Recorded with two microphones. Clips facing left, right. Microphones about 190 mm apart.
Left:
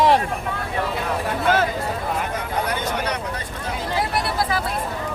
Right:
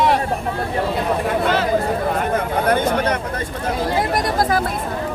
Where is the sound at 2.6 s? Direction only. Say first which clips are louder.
Right 7 dB; 55° right (ahead or behind).